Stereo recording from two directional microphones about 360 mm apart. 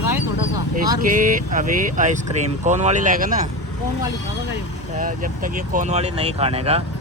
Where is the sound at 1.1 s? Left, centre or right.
Right.